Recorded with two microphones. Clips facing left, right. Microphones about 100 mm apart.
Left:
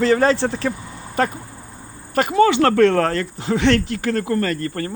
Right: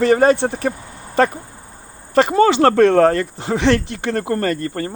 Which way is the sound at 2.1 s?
30° right (ahead or behind).